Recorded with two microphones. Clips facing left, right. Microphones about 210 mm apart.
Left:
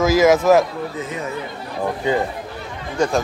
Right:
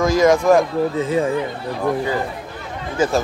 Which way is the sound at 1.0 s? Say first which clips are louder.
Right 8 dB; 30° right (ahead or behind).